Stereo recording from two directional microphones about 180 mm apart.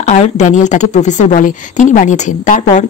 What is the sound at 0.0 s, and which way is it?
A woman's voice, 40° left (ahead or behind).